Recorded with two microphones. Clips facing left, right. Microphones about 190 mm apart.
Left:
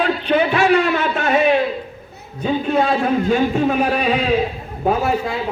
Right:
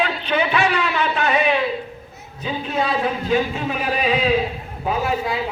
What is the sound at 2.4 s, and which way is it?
A man's voice, 45° left (ahead or behind).